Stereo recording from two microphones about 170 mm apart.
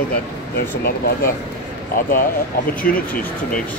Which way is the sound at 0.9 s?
65° left (ahead or behind).